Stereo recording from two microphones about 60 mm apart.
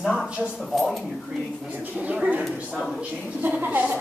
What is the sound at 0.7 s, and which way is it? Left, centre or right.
Speech, centre.